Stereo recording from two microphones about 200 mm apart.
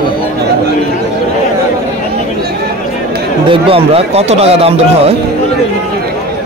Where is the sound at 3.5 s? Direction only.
30° right (ahead or behind).